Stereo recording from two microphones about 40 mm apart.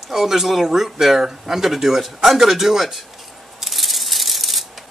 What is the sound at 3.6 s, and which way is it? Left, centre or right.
Rattle, centre.